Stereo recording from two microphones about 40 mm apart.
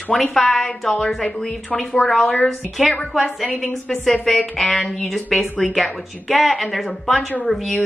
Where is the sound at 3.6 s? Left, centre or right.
Centre.